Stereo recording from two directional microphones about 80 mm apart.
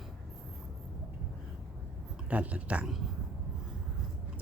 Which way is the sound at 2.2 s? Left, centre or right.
Centre.